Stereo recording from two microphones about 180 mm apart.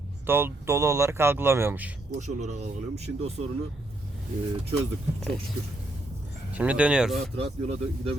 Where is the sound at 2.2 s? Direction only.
40° right (ahead or behind).